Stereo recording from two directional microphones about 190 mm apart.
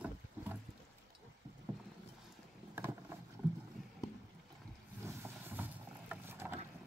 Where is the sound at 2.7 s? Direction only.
10° right (ahead or behind).